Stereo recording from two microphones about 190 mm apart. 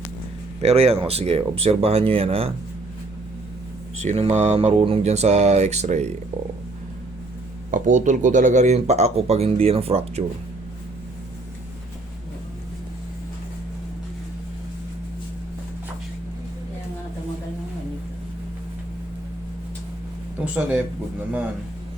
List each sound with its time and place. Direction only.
0.6 s speech: 30° right (ahead or behind)
4.0 s speech: 35° right (ahead or behind)
7.7 s speech: 40° right (ahead or behind)
20.4 s a sound: 5° right (ahead or behind)